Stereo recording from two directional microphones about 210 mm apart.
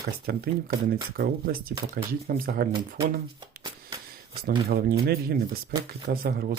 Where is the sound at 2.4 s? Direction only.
45° right (ahead or behind).